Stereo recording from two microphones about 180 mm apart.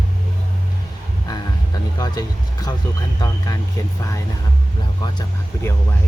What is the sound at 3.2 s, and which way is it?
Speech, 20° left (ahead or behind).